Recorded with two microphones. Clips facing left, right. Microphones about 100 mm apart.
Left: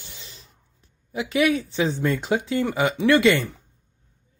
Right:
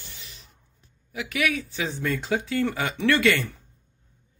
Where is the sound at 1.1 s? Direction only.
25° left (ahead or behind).